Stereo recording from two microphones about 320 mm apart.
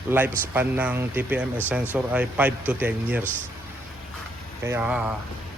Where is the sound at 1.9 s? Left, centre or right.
Centre.